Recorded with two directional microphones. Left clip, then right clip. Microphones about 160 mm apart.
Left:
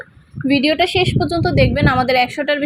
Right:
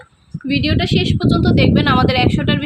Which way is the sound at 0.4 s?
15° left (ahead or behind).